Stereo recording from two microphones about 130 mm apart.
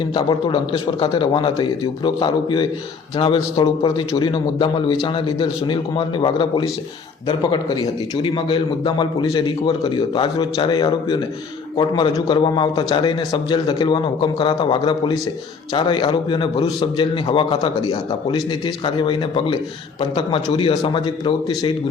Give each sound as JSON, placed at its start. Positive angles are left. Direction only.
{"t": 0.1, "sound": "a man's voice", "side_deg": 40}